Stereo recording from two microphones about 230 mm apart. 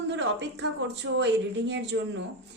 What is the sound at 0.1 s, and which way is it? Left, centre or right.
A woman's voice, right.